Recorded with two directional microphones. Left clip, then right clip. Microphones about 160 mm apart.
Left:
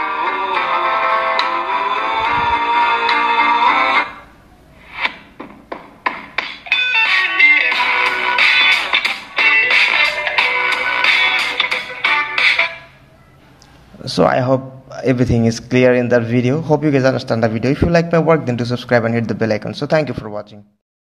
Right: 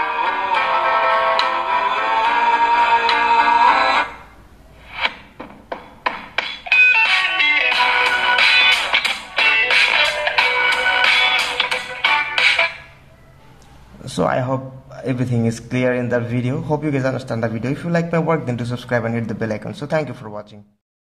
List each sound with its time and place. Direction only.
0.0 s music: centre (ahead or behind)
4.9 s a sound: 5° left (ahead or behind)
14.0 s a man's voice: 25° left (ahead or behind)